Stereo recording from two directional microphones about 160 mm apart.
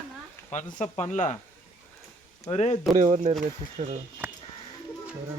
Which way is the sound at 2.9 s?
55° right (ahead or behind).